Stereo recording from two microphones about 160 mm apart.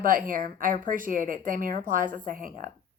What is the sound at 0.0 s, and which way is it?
A woman's voice, 60° right (ahead or behind).